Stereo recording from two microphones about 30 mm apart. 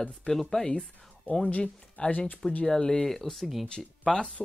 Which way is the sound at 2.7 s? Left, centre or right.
Left.